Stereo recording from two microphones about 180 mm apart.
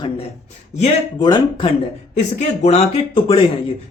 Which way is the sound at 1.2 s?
25° left (ahead or behind).